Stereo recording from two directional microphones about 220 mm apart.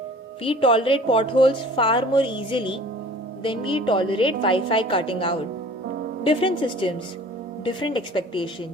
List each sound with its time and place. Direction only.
0.4 s a woman's voice: 25° left (ahead or behind)